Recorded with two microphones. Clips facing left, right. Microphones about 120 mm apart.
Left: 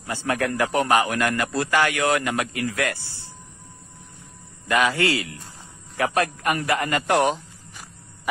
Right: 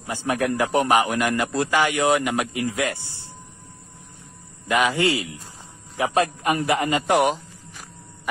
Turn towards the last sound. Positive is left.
turn(degrees=0)  # may be behind; listen again after turning